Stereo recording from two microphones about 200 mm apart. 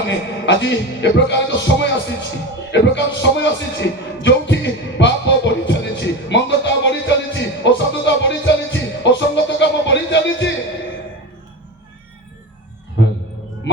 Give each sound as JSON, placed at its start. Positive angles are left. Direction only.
{"t": 0.1, "sound": "speech", "side_deg": 60}
{"t": 2.7, "sound": "music", "side_deg": 60}